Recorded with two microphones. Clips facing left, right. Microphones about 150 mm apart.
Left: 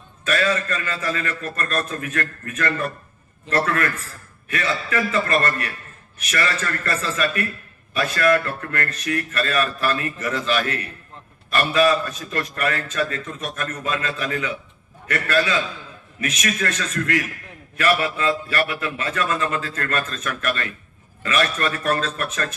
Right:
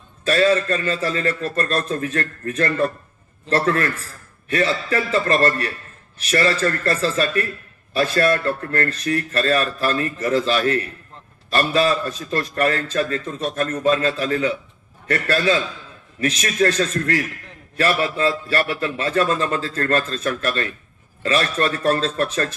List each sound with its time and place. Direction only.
0.2 s a man's voice: 30° right (ahead or behind)